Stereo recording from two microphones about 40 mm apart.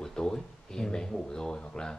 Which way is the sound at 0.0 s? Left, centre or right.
Centre.